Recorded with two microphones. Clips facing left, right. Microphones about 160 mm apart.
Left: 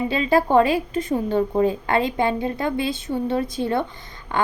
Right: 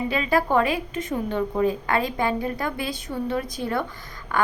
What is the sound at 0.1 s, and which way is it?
A woman's voice, 30° left (ahead or behind).